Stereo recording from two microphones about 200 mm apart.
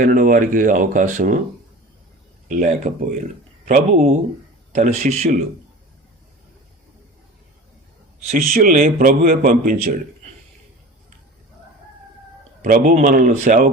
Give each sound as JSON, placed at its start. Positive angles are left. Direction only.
{"t": 0.0, "sound": "speech", "side_deg": -40}
{"t": 2.5, "sound": "speech", "side_deg": -40}
{"t": 8.6, "sound": "a man's voice", "side_deg": -45}
{"t": 12.6, "sound": "speech", "side_deg": -40}